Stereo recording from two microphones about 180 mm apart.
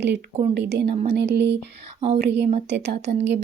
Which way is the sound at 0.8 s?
35° right (ahead or behind).